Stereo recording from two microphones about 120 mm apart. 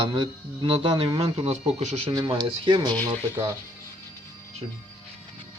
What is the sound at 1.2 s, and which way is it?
Speech, 55° right (ahead or behind).